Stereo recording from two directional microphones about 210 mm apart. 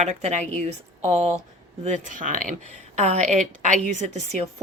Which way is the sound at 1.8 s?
35° right (ahead or behind).